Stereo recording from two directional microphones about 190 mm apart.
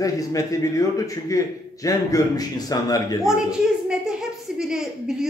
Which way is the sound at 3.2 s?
5° right (ahead or behind).